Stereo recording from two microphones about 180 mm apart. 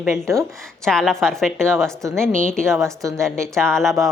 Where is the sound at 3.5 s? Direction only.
5° left (ahead or behind).